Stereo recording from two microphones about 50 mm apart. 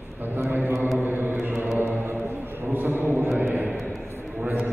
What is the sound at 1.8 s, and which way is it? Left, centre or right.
Chant, right.